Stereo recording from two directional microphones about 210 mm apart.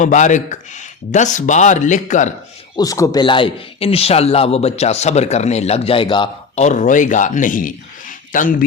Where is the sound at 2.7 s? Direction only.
15° left (ahead or behind); by 8.6 s 40° left (ahead or behind).